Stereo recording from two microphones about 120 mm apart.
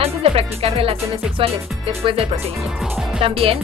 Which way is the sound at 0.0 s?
55° right (ahead or behind).